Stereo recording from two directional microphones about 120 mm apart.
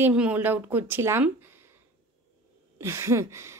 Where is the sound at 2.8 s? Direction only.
25° right (ahead or behind).